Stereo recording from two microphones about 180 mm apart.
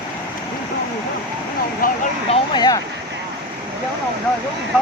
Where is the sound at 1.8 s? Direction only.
50° left (ahead or behind).